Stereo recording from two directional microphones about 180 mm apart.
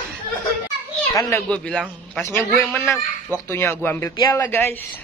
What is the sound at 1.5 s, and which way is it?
A man's voice, 5° left (ahead or behind).